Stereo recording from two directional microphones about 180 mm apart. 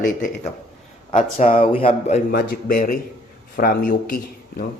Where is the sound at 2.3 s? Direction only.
55° left (ahead or behind).